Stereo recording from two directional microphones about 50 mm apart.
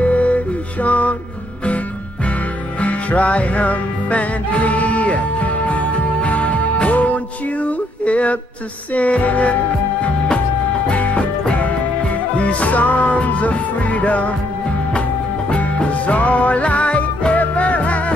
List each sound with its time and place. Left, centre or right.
0.0 s music: left
2.8 s music: left
15.5 s music: left